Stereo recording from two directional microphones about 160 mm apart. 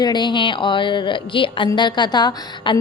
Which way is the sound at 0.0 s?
25° left (ahead or behind).